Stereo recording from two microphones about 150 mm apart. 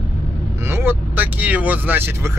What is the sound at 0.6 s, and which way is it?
Speech, 15° right (ahead or behind).